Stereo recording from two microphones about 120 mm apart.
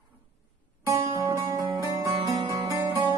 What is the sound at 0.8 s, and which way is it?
Music, 30° right (ahead or behind).